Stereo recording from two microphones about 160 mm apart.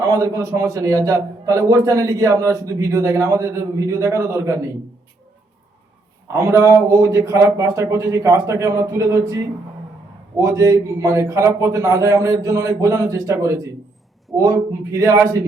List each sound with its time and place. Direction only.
0.0 s a man's voice: 20° right (ahead or behind)
6.2 s a man's voice: 20° right (ahead or behind)